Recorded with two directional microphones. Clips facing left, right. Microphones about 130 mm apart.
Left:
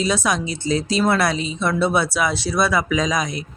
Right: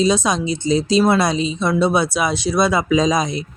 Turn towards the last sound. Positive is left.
turn(degrees=-25)  # may be behind; listen again after turning